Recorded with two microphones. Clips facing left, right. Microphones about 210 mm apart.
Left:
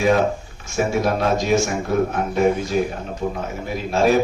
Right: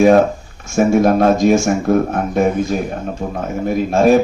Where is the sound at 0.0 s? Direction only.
45° right (ahead or behind).